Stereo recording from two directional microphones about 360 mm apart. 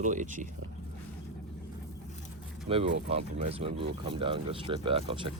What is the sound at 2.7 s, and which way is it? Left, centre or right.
Speech, centre.